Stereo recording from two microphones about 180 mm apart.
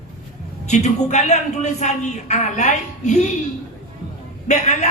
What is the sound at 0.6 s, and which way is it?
A man's voice, 40° left (ahead or behind).